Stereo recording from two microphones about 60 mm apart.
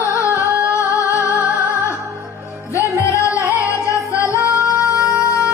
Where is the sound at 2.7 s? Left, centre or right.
Left.